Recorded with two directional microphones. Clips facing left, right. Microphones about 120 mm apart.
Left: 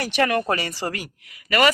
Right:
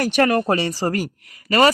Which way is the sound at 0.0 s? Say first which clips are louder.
Right 4 dB; 45° right (ahead or behind).